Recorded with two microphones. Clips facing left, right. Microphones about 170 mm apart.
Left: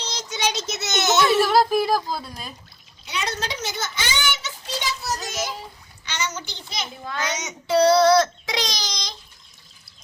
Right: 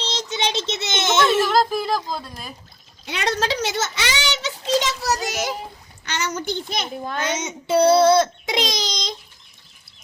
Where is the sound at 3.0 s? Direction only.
65° right (ahead or behind).